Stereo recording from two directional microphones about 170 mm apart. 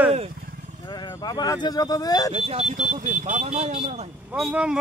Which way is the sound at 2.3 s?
35° right (ahead or behind).